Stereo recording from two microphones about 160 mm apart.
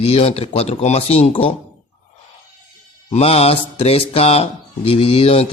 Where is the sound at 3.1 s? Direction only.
40° left (ahead or behind).